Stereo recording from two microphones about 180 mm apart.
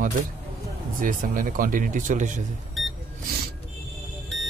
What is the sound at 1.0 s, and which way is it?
Speech, 50° right (ahead or behind).